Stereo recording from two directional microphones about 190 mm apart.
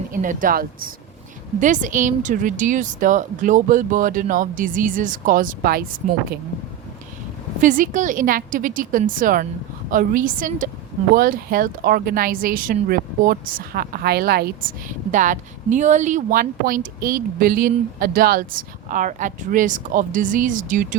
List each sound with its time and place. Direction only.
0.1 s a woman's voice: 45° right (ahead or behind)
7.6 s a woman's voice: 45° right (ahead or behind)
15.1 s a woman's voice: 45° right (ahead or behind)